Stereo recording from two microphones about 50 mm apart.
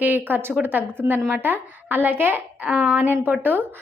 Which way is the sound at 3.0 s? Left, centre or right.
Right.